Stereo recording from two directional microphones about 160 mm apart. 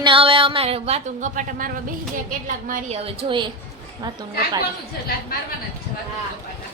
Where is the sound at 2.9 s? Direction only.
40° right (ahead or behind).